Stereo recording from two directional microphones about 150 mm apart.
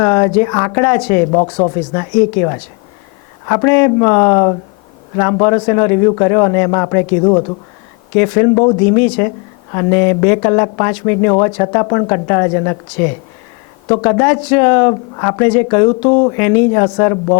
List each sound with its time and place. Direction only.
0.0 s speech: 20° left (ahead or behind)